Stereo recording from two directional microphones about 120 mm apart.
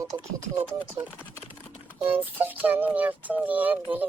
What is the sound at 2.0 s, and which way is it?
Speech, 15° right (ahead or behind).